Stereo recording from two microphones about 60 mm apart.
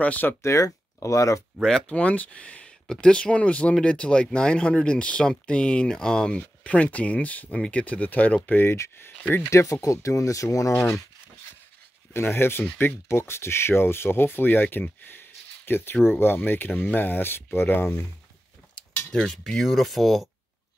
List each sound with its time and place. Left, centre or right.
0.0 s speech: left
0.4 s speech: left
2.0 s speech: left
8.5 s speech: left
9.5 s speech: left
12.1 s speech: left
13.1 s speech: left
19.2 s speech: centre